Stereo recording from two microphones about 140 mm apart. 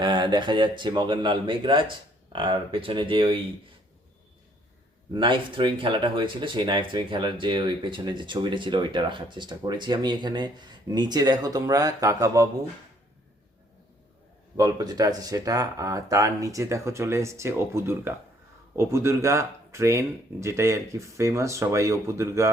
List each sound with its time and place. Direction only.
0.0 s speech: 35° right (ahead or behind)
5.1 s speech: 35° right (ahead or behind)
14.5 s speech: 25° right (ahead or behind)